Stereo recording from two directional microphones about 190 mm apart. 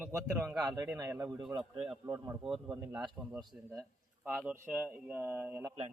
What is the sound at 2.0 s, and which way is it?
Speech, 20° right (ahead or behind).